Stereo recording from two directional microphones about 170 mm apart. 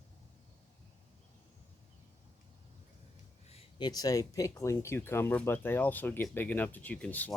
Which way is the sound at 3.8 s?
20° left (ahead or behind).